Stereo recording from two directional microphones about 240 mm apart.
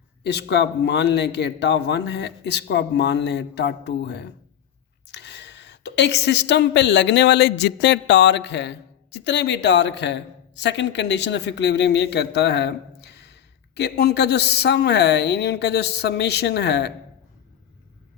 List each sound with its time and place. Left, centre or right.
0.3 s a woman's voice: left